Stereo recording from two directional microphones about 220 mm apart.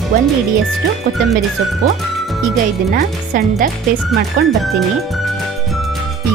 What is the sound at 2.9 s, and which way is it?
Speech, 40° right (ahead or behind).